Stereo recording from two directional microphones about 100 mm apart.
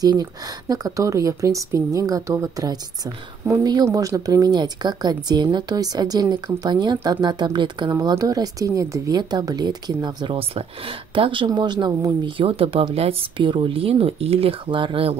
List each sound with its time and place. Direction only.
0.0 s speech: 40° right (ahead or behind)
8.2 s speech: 40° right (ahead or behind)
11.1 s speech: 55° right (ahead or behind)
12.4 s speech: 70° right (ahead or behind)
13.4 s speech: 55° right (ahead or behind)